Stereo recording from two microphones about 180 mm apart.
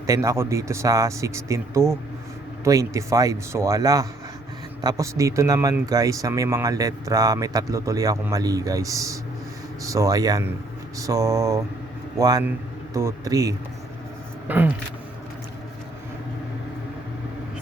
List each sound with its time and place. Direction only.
0.0 s speech: 15° right (ahead or behind)